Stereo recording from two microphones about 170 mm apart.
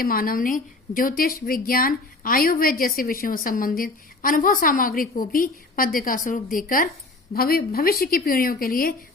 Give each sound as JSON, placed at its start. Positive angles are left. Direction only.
{"t": 0.0, "sound": "a woman's voice", "side_deg": 60}